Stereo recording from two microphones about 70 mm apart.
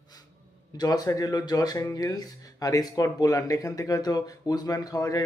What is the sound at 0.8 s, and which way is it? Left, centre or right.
Speech, left.